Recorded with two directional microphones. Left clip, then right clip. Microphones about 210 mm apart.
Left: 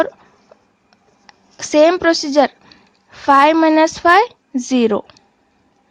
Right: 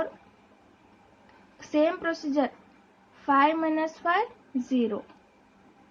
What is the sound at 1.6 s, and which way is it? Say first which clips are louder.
A woman's voice: left 14 dB; 45° left (ahead or behind).